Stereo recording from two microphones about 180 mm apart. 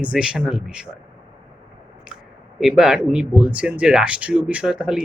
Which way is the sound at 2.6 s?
Centre (ahead or behind).